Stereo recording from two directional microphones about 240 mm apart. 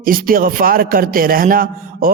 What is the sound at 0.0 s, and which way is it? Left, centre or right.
A man's voice, right.